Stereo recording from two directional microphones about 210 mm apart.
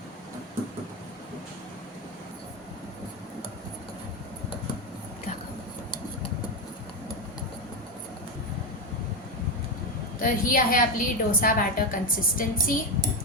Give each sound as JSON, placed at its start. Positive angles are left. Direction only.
{"t": 10.2, "sound": "a woman's voice", "side_deg": 40}